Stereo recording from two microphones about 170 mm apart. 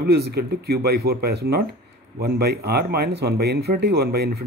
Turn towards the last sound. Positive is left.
turn(degrees=-70)  # may be behind; listen again after turning